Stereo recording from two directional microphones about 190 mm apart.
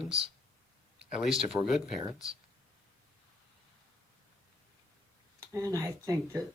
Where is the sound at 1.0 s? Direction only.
5° right (ahead or behind).